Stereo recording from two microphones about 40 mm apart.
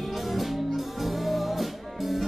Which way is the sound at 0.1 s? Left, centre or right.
Centre.